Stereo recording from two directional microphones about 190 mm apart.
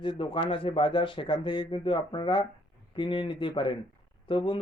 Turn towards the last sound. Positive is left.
turn(degrees=25)  # may be behind; listen again after turning